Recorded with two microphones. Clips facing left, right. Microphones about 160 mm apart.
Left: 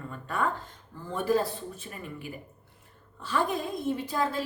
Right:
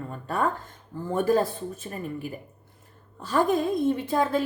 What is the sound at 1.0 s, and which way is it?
Speech, 45° right (ahead or behind).